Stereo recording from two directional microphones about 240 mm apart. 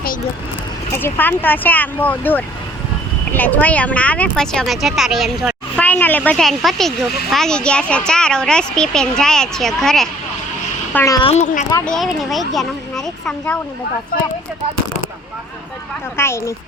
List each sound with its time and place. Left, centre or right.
0.9 s speech: centre
10.9 s a child's voice: centre; by 11.6 s left
11.9 s speech: centre
16.1 s speech: centre